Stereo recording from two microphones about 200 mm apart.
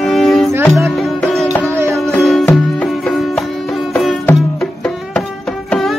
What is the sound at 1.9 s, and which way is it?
Music, centre (ahead or behind).